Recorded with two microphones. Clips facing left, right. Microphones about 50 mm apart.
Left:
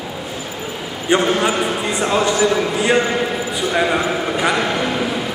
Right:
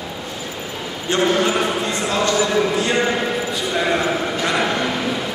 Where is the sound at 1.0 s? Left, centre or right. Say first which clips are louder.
Left 2 dB; centre.